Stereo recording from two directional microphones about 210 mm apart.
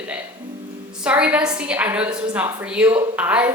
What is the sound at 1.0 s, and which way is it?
A woman's voice, 5° right (ahead or behind).